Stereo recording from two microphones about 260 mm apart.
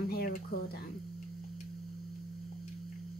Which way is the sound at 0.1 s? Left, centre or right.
Left.